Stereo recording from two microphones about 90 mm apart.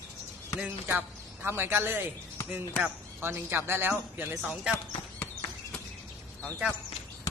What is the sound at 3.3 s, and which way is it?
A woman's voice, 25° right (ahead or behind).